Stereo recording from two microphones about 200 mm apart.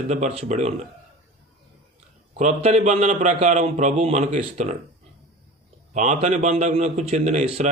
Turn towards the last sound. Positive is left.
turn(degrees=-35)  # may be behind; listen again after turning